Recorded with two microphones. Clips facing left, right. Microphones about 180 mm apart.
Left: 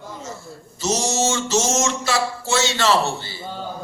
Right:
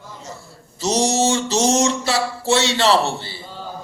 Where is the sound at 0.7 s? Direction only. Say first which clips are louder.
Right 3 dB; 35° right (ahead or behind).